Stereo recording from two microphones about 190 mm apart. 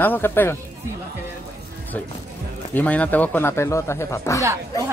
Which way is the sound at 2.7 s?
5° left (ahead or behind).